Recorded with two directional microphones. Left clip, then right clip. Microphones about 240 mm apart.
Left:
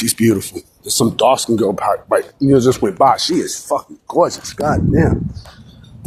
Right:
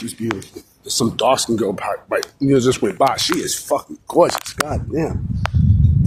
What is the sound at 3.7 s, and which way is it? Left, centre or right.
Speech, centre.